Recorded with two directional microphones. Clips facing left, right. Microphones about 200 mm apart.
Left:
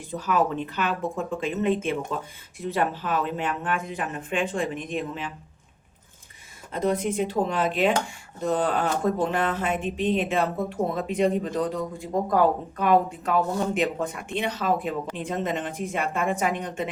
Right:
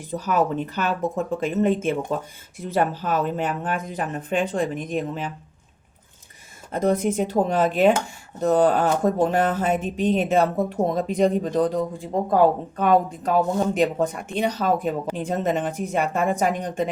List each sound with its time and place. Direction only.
0.1 s speech: 40° right (ahead or behind)
6.7 s speech: 45° right (ahead or behind)